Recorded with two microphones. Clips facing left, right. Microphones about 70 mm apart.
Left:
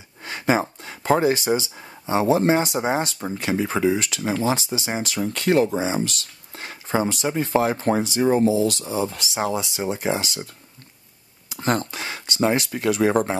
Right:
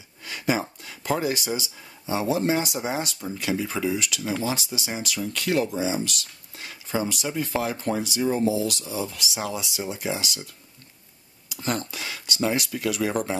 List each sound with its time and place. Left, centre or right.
0.2 s speech: left